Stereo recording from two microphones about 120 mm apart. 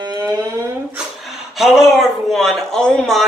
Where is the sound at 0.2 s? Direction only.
30° right (ahead or behind).